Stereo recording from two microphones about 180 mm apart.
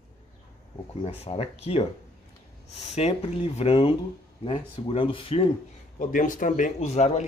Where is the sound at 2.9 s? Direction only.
35° left (ahead or behind).